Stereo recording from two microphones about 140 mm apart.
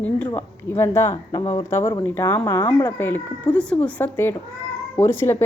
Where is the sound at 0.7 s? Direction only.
20° left (ahead or behind); by 1.6 s 35° left (ahead or behind).